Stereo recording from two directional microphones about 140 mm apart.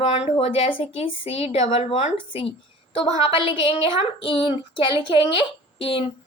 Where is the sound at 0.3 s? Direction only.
45° left (ahead or behind).